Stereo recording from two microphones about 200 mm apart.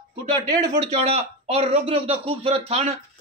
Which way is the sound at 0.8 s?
30° right (ahead or behind).